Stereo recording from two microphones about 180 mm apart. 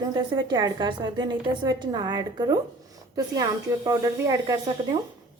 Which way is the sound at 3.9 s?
20° right (ahead or behind).